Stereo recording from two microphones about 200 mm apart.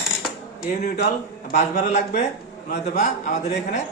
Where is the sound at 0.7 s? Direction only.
50° left (ahead or behind).